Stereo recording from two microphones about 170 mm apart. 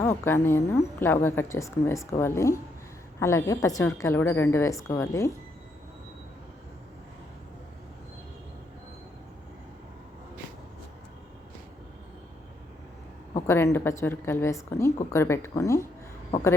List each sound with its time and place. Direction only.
0.0 s a woman's voice: 15° left (ahead or behind)
13.5 s a woman's voice: 15° left (ahead or behind)